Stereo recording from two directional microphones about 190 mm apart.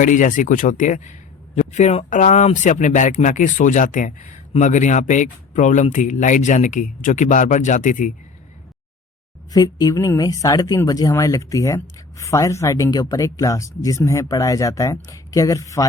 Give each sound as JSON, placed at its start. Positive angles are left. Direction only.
{"t": 0.0, "sound": "speech", "side_deg": 45}
{"t": 9.5, "sound": "speech", "side_deg": 20}